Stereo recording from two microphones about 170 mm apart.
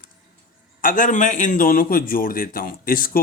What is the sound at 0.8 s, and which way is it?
A man's voice, 50° left (ahead or behind).